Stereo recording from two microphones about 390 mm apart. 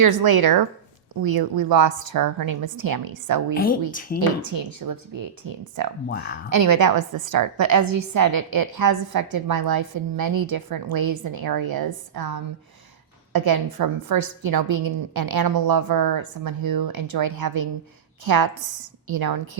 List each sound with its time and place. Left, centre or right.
0.0 s a woman's voice: right
3.5 s speech: left
4.5 s a woman's voice: right
6.1 s speech: left
6.7 s a woman's voice: right